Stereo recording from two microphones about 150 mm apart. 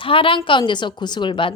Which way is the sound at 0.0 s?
35° left (ahead or behind).